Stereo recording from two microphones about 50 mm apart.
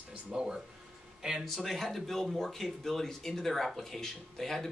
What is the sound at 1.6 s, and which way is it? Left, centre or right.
Speech, centre.